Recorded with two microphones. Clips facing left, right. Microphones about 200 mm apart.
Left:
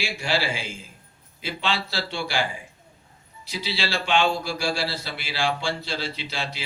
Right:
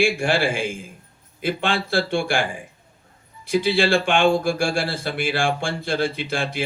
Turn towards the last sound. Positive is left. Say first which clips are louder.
# right 6 dB
turn(degrees=-50)  # may be behind; listen again after turning